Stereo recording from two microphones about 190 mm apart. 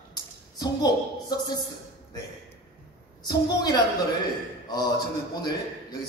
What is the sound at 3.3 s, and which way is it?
A man's voice, 20° left (ahead or behind).